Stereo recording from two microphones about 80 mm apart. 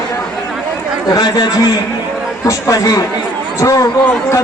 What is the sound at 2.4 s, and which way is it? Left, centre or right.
Speech, left.